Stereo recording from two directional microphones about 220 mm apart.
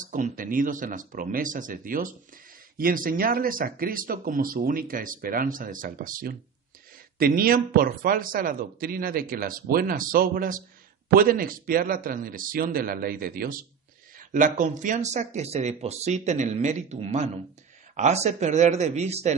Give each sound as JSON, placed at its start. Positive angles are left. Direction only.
{"t": 0.0, "sound": "speech", "side_deg": -35}